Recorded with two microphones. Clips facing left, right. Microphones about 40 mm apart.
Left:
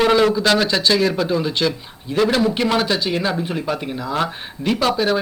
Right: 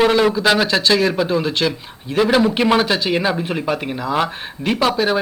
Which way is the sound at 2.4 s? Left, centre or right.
Right.